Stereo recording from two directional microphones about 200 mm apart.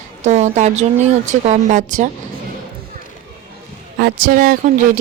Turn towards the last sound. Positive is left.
turn(degrees=-45)  # may be behind; listen again after turning